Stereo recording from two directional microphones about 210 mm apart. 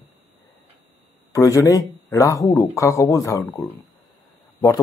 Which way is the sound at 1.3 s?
15° left (ahead or behind).